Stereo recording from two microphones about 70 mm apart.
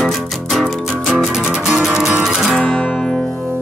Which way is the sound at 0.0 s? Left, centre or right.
Centre.